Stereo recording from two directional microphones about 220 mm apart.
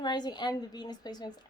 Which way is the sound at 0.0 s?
20° left (ahead or behind).